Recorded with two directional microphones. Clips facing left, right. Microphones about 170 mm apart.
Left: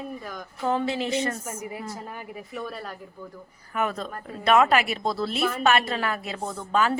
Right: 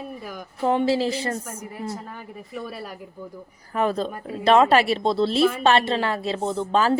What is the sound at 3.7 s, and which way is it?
A woman's voice, 30° right (ahead or behind).